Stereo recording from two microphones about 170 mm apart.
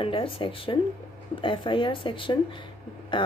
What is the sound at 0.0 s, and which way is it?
Speech, 30° left (ahead or behind).